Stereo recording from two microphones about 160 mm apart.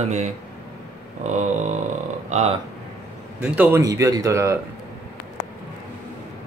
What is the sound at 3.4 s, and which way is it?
Speech, 10° right (ahead or behind).